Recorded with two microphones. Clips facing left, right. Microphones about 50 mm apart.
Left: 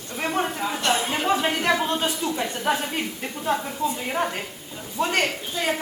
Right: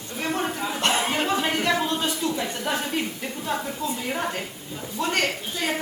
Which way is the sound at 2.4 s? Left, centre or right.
Centre.